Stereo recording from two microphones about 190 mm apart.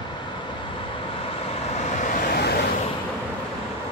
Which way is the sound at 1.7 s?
40° left (ahead or behind).